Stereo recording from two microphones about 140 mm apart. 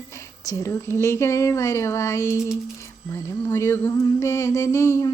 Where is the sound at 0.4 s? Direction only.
20° left (ahead or behind).